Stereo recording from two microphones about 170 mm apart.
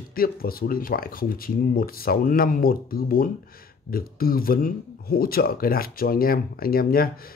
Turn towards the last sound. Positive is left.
turn(degrees=60)  # may be behind; listen again after turning